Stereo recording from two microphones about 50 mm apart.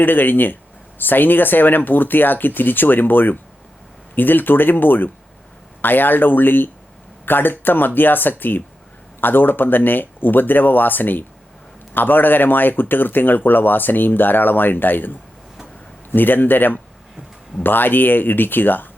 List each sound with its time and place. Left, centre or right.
0.0 s speech: left
16.1 s speech: left